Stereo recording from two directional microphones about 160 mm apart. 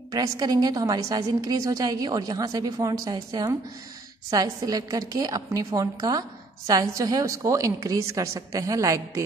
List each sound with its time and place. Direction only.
0.1 s a woman's voice: 25° right (ahead or behind)